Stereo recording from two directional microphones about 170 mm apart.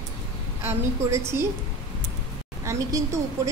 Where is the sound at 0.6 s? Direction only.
15° right (ahead or behind).